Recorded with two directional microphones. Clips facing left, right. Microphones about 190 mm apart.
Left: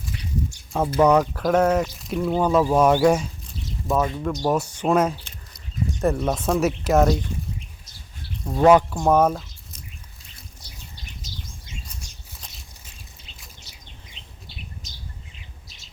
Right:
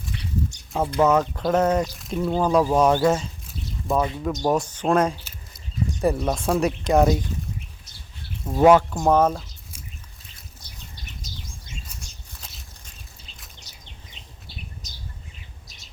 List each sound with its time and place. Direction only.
0.7 s speech: 5° right (ahead or behind)
1.5 s speech: 10° right (ahead or behind); by 3.2 s 10° left (ahead or behind)
3.4 s a sound: centre (ahead or behind)
4.0 s speech: 15° right (ahead or behind)
4.4 s speech: 5° left (ahead or behind)
5.2 s a sound: centre (ahead or behind)
6.6 s speech: 5° left (ahead or behind)
8.4 s speech: 5° right (ahead or behind)
9.0 s speech: 5° left (ahead or behind)